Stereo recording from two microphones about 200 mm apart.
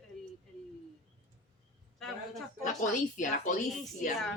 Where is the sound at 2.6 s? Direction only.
40° left (ahead or behind).